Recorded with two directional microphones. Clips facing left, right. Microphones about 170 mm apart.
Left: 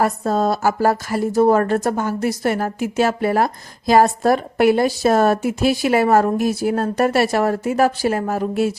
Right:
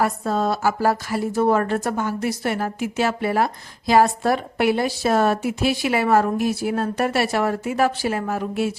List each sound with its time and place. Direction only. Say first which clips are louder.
0.0 s a woman's voice: left 3 dB; 40° left (ahead or behind)